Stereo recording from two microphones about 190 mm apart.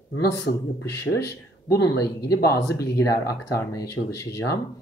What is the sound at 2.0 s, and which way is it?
Speech, 60° left (ahead or behind).